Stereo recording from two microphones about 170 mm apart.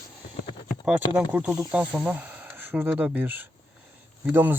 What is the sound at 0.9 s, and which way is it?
Speech, 10° right (ahead or behind).